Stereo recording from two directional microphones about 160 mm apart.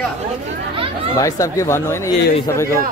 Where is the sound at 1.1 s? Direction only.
20° left (ahead or behind).